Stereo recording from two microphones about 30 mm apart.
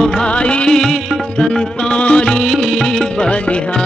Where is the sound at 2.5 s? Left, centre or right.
Centre.